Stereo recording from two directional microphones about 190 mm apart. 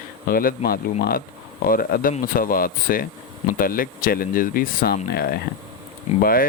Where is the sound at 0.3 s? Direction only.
50° left (ahead or behind).